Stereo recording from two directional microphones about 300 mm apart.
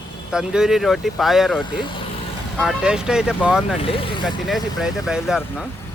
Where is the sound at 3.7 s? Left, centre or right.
Centre.